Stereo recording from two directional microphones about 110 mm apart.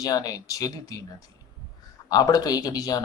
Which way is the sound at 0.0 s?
35° left (ahead or behind).